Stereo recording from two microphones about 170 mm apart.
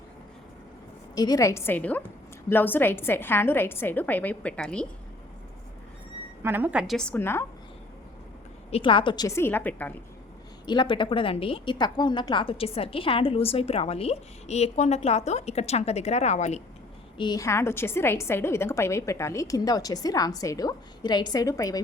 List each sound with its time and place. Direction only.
1.1 s a woman's voice: 25° left (ahead or behind); by 4.9 s 5° left (ahead or behind)
6.4 s a woman's voice: 10° right (ahead or behind); by 7.4 s 15° left (ahead or behind)
8.7 s a woman's voice: 30° left (ahead or behind); by 9.9 s 10° left (ahead or behind)
10.7 s a woman's voice: 30° left (ahead or behind)
17.2 s a woman's voice: 25° left (ahead or behind)